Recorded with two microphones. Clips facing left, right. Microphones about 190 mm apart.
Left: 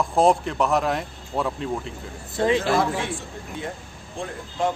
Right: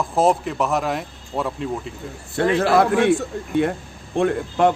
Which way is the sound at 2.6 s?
60° right (ahead or behind).